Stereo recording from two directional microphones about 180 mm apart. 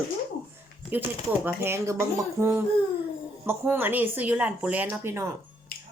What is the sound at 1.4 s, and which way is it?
Speech, 15° right (ahead or behind).